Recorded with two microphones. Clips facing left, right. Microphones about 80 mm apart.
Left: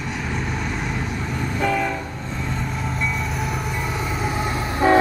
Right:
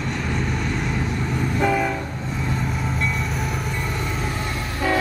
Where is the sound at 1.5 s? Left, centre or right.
Centre.